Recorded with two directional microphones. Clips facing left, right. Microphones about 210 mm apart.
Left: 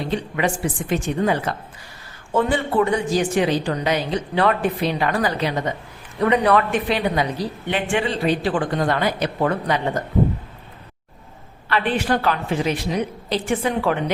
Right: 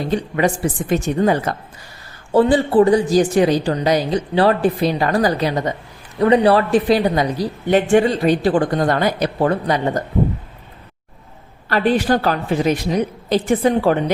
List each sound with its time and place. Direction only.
0.1 s a woman's voice: 40° right (ahead or behind)
11.7 s a woman's voice: 40° right (ahead or behind)